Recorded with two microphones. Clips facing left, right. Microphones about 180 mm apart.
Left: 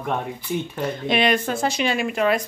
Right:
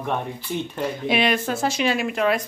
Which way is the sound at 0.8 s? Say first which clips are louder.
Left 1 dB; 5° right (ahead or behind).